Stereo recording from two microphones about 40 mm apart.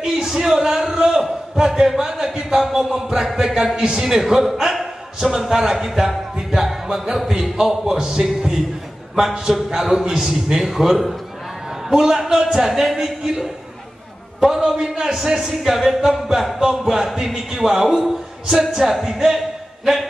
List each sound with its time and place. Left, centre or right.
0.0 s a sound: centre
1.6 s a man's voice: centre
3.9 s a man's voice: centre